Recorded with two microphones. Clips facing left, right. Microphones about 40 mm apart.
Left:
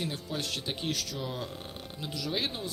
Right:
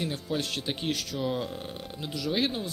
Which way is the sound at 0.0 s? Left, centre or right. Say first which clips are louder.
Right 4 dB; right.